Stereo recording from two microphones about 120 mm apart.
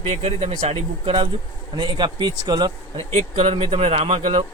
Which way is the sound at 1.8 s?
40° right (ahead or behind).